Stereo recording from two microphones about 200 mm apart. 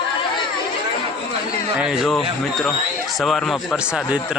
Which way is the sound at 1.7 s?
Centre (ahead or behind).